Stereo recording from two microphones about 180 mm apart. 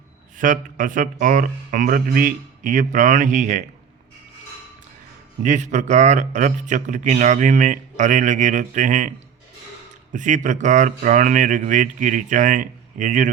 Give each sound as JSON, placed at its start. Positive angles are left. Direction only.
{"t": 0.3, "sound": "speech", "side_deg": -50}
{"t": 5.4, "sound": "speech", "side_deg": -40}